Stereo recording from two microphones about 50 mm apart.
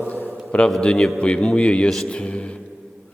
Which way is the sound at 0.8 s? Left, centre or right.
Centre.